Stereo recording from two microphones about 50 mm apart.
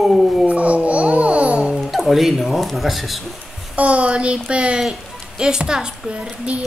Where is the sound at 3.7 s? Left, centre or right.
Right.